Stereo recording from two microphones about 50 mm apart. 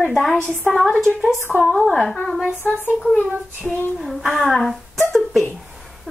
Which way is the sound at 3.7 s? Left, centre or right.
Centre.